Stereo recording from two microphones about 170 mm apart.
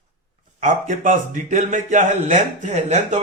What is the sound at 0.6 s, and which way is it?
A man's voice, 50° right (ahead or behind).